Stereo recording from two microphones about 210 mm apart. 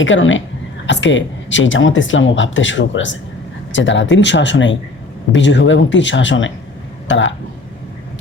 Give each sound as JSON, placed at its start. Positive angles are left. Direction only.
{"t": 0.0, "sound": "speech", "side_deg": 65}